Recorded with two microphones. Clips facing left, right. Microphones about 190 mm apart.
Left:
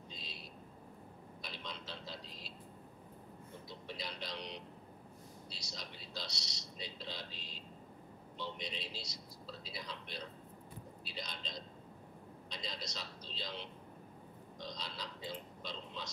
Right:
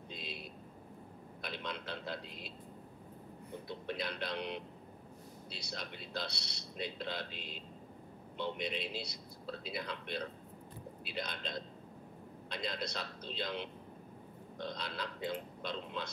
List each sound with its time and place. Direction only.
0.1 s a sound: 60° right (ahead or behind)
1.4 s a man's voice: 60° right (ahead or behind)
3.6 s speech: 60° right (ahead or behind)